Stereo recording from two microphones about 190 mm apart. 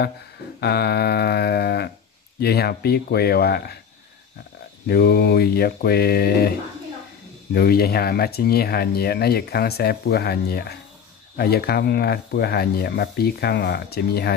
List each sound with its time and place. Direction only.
0.6 s speech: 60° left (ahead or behind)
4.8 s speech: 55° left (ahead or behind)
7.5 s speech: 55° left (ahead or behind)